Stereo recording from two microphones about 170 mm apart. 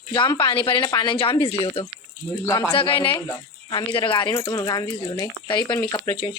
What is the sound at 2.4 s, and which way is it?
Speech, 15° left (ahead or behind).